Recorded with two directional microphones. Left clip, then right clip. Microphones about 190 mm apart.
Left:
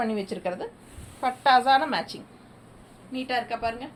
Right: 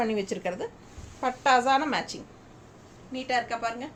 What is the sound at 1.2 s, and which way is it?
A woman's voice, 20° right (ahead or behind).